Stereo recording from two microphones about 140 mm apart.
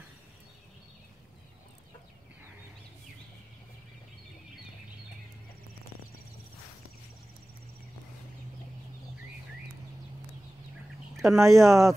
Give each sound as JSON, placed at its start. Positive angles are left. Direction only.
{"t": 11.3, "sound": "speech", "side_deg": -20}